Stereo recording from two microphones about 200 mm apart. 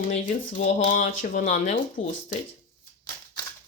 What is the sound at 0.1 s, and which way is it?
Speech, 40° left (ahead or behind).